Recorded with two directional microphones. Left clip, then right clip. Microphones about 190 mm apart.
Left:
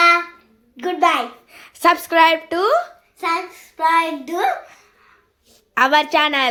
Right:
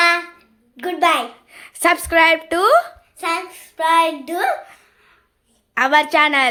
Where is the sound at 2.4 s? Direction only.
25° right (ahead or behind).